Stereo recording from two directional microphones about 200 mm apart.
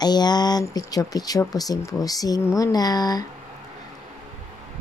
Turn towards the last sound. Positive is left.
turn(degrees=20)  # may be behind; listen again after turning